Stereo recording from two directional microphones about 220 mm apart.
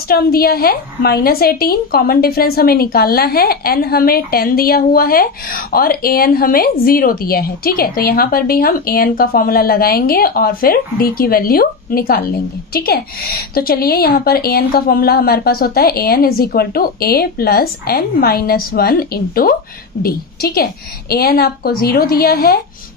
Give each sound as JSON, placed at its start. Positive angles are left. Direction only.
{"t": 0.1, "sound": "a woman's voice", "side_deg": 45}